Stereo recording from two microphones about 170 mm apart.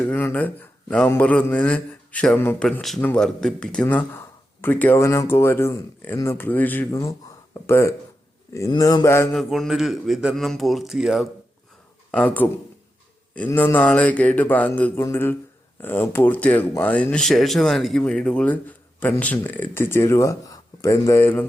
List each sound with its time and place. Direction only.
0.0 s a man's voice: 10° left (ahead or behind)
9.4 s speech: centre (ahead or behind)
12.1 s a man's voice: 10° left (ahead or behind)